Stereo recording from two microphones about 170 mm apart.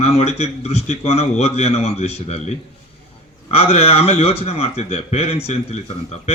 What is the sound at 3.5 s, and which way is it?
Speech, 35° left (ahead or behind).